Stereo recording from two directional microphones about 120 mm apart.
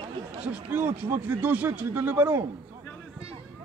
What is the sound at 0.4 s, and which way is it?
Speech, 15° right (ahead or behind).